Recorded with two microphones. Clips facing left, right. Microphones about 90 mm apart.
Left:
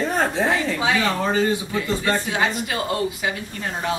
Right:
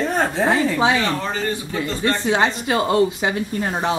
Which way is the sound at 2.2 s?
25° right (ahead or behind).